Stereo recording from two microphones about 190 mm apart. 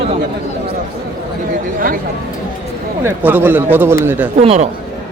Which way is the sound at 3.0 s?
10° right (ahead or behind).